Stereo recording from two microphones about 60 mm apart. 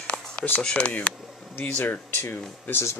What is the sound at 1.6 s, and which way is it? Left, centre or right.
Speech, left.